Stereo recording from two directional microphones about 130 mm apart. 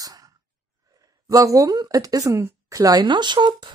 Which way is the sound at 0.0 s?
30° right (ahead or behind).